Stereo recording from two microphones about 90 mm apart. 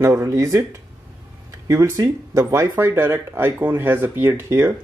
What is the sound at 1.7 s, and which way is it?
Speech, 35° right (ahead or behind).